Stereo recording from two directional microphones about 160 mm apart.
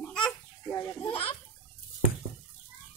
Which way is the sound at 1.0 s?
35° left (ahead or behind).